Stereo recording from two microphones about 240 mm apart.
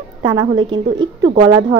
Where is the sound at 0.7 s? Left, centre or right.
Right.